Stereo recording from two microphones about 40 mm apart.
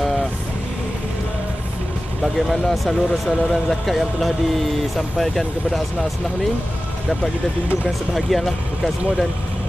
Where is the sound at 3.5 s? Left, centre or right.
Centre.